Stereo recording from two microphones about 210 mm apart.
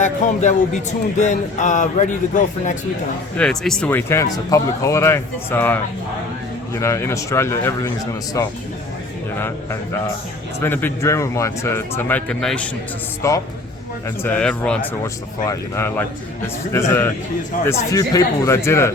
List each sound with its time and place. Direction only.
0.0 s speech: 35° left (ahead or behind)
3.3 s speech: 5° left (ahead or behind)
10.6 s speech: 10° left (ahead or behind)
13.2 s speech: 15° left (ahead or behind)
17.7 s speech: 15° left (ahead or behind)